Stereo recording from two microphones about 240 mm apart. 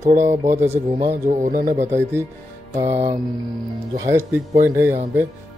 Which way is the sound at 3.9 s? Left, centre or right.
Centre.